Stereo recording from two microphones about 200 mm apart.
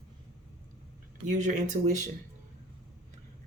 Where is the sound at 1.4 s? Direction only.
40° right (ahead or behind).